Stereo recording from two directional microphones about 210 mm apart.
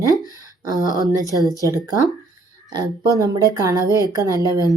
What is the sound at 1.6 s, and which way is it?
Speech, 15° right (ahead or behind).